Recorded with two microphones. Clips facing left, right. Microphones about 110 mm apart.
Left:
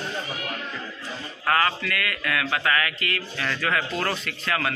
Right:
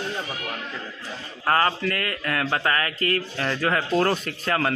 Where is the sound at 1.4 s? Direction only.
30° right (ahead or behind).